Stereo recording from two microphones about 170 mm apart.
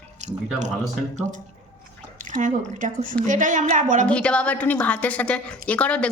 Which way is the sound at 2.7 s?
50° right (ahead or behind).